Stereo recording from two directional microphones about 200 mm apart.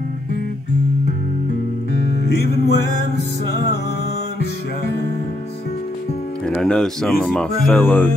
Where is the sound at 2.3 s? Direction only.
55° left (ahead or behind).